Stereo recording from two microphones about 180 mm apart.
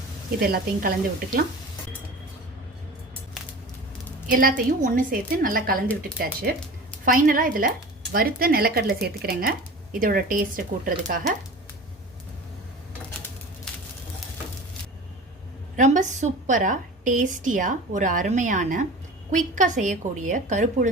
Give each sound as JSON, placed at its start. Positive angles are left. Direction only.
{"t": 0.3, "sound": "speech", "side_deg": -60}
{"t": 4.3, "sound": "a woman's voice", "side_deg": -50}
{"t": 13.7, "sound": "a sound", "side_deg": 5}
{"t": 15.7, "sound": "a woman's voice", "side_deg": -40}